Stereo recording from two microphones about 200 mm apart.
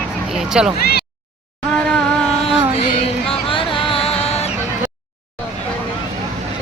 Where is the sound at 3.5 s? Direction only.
25° left (ahead or behind).